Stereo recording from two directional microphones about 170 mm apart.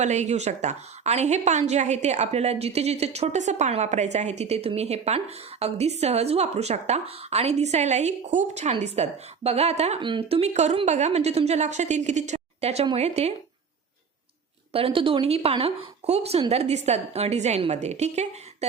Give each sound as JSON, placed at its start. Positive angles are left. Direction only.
{"t": 0.0, "sound": "a woman's voice", "side_deg": -45}
{"t": 14.7, "sound": "a woman's voice", "side_deg": -35}